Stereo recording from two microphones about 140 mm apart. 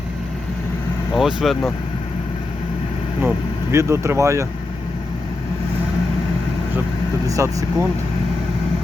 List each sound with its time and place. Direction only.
1.1 s speech: centre (ahead or behind)
3.2 s speech: 15° right (ahead or behind)
7.3 s speech: 25° right (ahead or behind)